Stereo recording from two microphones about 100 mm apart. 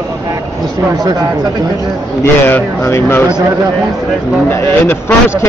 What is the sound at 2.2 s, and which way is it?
Speech, 25° left (ahead or behind).